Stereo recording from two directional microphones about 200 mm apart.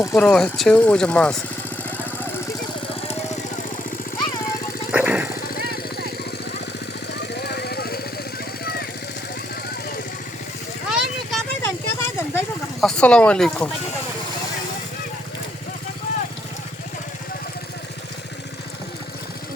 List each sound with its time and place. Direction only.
0.0 s speech: 10° left (ahead or behind)
4.9 s jackhammer: 5° right (ahead or behind)
5.4 s jackhammer: 50° left (ahead or behind)
7.1 s jackhammer: 55° left (ahead or behind)
10.8 s a sound: centre (ahead or behind)
11.6 s a sound: 10° left (ahead or behind)
12.8 s speech: 5° left (ahead or behind)